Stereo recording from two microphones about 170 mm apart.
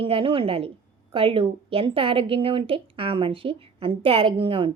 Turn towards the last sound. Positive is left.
turn(degrees=-30)  # may be behind; listen again after turning